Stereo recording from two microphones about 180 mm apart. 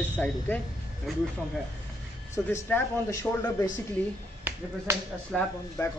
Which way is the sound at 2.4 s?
10° left (ahead or behind).